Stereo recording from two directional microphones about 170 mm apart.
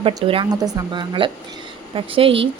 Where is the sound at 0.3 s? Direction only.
30° right (ahead or behind).